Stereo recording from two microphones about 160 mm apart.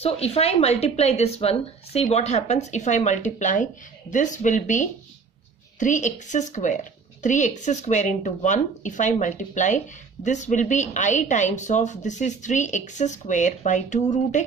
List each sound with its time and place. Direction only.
0.0 s a woman's voice: 40° left (ahead or behind)